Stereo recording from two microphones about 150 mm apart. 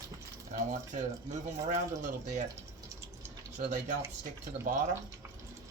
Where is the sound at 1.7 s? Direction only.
55° right (ahead or behind).